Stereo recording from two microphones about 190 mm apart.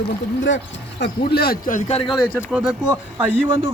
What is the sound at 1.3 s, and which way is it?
Speech, 55° left (ahead or behind).